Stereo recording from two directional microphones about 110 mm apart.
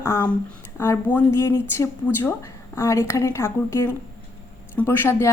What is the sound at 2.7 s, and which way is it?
Speech, 25° left (ahead or behind).